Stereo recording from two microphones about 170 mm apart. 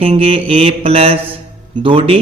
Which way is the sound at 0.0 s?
35° right (ahead or behind).